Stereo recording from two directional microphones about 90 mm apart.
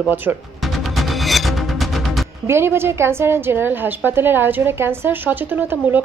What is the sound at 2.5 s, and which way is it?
A woman's voice, 25° right (ahead or behind).